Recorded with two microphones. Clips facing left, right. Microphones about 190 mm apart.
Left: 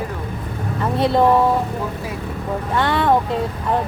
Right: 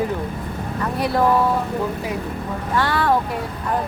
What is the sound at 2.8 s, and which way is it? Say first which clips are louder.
Speech: left 2 dB; 20° left (ahead or behind).